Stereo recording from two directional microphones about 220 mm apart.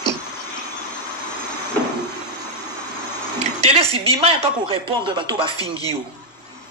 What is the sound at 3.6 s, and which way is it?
Speech, 25° right (ahead or behind).